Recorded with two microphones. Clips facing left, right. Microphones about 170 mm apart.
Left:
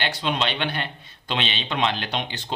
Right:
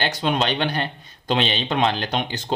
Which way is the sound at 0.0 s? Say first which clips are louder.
Right 3 dB; 45° right (ahead or behind).